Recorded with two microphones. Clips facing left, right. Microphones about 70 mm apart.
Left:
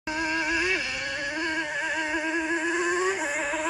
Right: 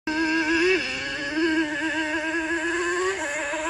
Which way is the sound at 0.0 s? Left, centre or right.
Centre.